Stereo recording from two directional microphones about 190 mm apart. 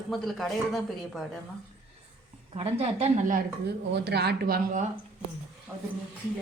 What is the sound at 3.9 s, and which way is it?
Speech, 60° right (ahead or behind).